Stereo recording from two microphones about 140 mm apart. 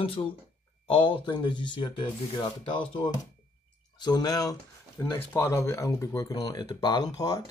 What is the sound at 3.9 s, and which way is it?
Speech, 30° left (ahead or behind).